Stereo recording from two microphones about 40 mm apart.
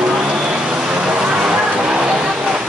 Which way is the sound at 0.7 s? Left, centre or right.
Right.